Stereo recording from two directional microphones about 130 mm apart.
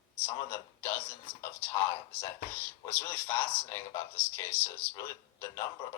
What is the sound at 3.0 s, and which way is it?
Speech, 15° left (ahead or behind).